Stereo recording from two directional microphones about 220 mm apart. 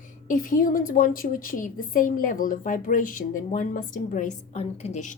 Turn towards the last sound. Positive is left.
turn(degrees=35)  # may be behind; listen again after turning